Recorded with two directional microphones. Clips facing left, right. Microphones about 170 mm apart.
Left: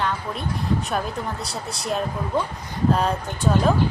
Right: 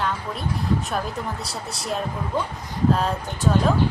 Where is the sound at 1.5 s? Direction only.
Centre (ahead or behind).